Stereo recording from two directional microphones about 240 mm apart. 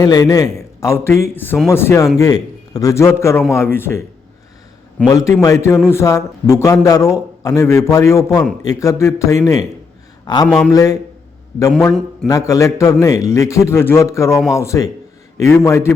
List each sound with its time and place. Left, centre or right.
0.0 s a man's voice: centre
5.0 s a man's voice: centre
5.7 s speech: centre
6.0 s a man's voice: centre
12.3 s a man's voice: centre